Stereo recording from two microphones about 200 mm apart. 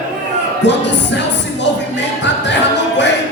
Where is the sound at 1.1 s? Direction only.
60° left (ahead or behind).